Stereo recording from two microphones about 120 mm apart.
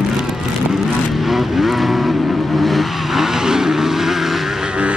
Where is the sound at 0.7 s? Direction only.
Centre (ahead or behind).